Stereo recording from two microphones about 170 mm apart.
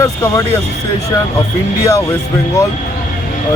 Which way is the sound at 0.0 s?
20° left (ahead or behind).